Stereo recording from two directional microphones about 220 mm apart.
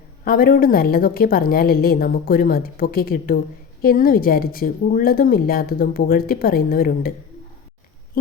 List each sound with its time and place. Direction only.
0.3 s a woman's voice: 40° left (ahead or behind)